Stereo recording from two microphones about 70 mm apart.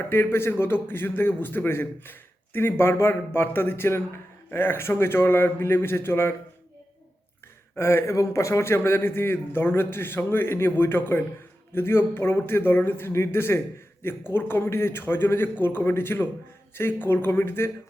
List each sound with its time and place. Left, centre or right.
0.1 s a man's voice: left
7.8 s a man's voice: left